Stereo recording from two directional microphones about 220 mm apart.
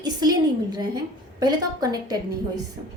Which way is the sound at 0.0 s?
20° right (ahead or behind).